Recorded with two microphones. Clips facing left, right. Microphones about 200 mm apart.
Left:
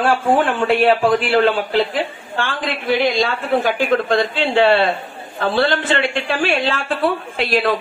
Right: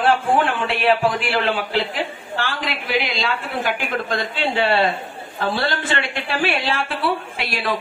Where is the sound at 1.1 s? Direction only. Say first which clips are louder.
Left 7 dB; 45° left (ahead or behind).